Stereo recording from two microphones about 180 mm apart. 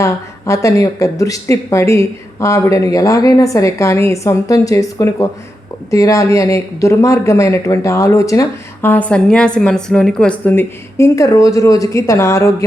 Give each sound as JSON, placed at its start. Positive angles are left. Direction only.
{"t": 0.0, "sound": "speech", "side_deg": 15}